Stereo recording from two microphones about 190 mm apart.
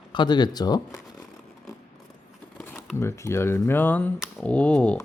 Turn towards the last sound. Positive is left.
turn(degrees=5)  # may be behind; listen again after turning